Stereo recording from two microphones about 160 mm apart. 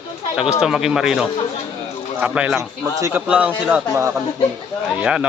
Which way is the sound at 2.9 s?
20° right (ahead or behind).